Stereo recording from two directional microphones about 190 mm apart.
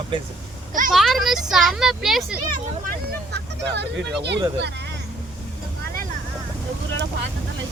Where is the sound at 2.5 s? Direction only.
45° right (ahead or behind).